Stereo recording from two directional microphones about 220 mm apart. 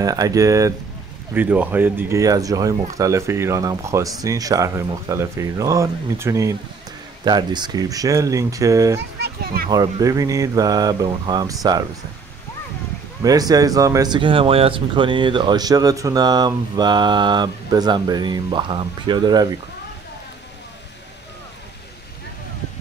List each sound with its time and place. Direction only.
0.0 s speech: 15° right (ahead or behind)
9.2 s a child's voice: 45° right (ahead or behind)
9.7 s speech: 15° right (ahead or behind)
13.2 s speech: 15° right (ahead or behind)